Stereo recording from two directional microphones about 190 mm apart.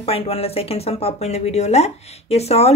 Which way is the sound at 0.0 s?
30° left (ahead or behind).